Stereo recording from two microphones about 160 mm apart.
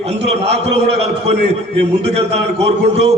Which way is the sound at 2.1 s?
40° right (ahead or behind).